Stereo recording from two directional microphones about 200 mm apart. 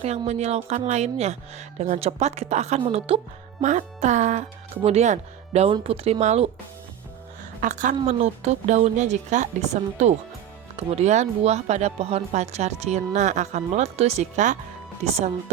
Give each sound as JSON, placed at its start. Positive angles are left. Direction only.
{"t": 0.0, "sound": "speech", "side_deg": -35}
{"t": 7.6, "sound": "speech", "side_deg": -40}